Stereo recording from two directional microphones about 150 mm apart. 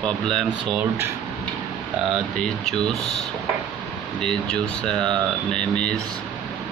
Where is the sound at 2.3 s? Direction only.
5° left (ahead or behind).